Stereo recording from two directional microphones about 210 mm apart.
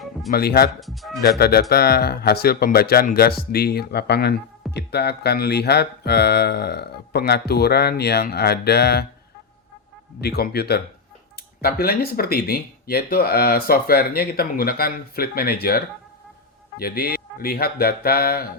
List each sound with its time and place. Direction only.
0.3 s speech: 45° left (ahead or behind)
0.8 s speech: centre (ahead or behind)
1.2 s speech: 45° left (ahead or behind)
10.2 s speech: 50° left (ahead or behind)